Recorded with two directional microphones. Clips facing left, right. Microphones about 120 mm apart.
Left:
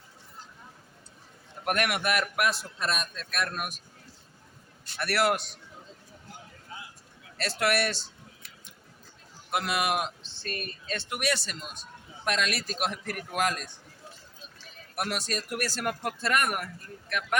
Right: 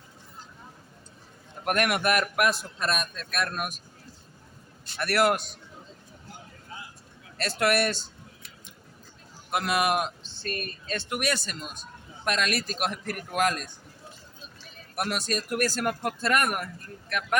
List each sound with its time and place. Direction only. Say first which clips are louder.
1.6 s speech: right 3 dB; 45° right (ahead or behind)
4.9 s speech: right 3 dB; 45° right (ahead or behind)
7.3 s speech: right 2 dB; 45° right (ahead or behind)
9.5 s speech: right 3 dB; 50° right (ahead or behind)
14.9 s speech: right 3 dB; 45° right (ahead or behind)